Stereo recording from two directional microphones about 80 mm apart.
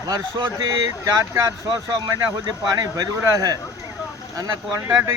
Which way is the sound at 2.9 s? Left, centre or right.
Right.